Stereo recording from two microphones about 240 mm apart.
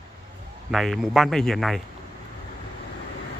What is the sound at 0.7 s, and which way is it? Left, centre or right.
Speech, centre.